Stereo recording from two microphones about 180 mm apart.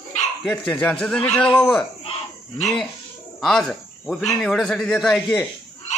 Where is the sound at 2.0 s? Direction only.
35° left (ahead or behind).